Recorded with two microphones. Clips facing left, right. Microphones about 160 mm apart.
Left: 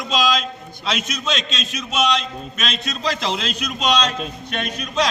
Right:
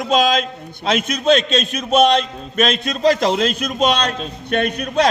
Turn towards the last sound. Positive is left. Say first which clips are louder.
# right 5 dB
turn(degrees=-60)  # may be behind; listen again after turning